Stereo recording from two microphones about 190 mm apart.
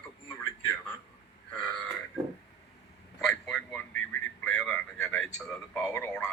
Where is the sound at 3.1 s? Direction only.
Centre (ahead or behind).